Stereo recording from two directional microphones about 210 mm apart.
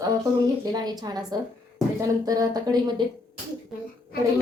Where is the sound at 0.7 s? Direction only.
20° right (ahead or behind).